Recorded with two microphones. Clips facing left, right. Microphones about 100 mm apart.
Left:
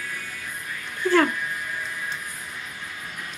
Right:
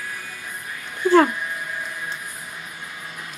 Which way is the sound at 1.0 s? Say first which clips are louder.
Right 4 dB; 20° right (ahead or behind).